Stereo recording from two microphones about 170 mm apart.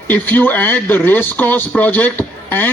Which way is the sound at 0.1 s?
10° left (ahead or behind).